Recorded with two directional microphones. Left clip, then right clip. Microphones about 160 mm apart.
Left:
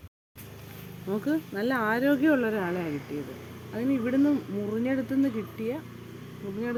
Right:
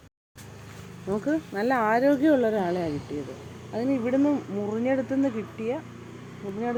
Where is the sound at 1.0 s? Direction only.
35° left (ahead or behind).